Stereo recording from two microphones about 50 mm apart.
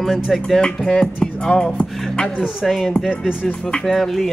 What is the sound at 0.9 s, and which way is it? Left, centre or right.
Music, centre.